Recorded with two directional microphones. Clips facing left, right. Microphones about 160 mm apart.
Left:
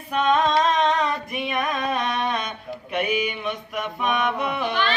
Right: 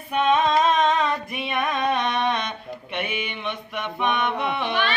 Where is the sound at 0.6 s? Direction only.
Centre (ahead or behind).